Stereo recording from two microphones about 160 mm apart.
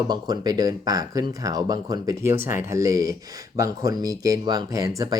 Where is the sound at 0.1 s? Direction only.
25° right (ahead or behind).